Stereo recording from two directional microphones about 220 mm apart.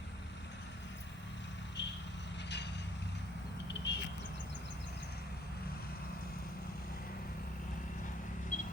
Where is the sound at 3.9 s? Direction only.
55° left (ahead or behind).